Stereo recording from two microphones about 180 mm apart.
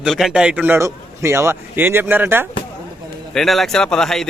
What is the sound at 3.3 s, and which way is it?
Speech, centre (ahead or behind).